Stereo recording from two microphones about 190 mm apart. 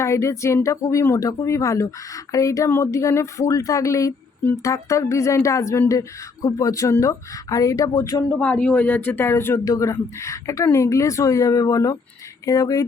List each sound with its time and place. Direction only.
0.0 s speech: 15° left (ahead or behind)
8.3 s speech: 5° left (ahead or behind)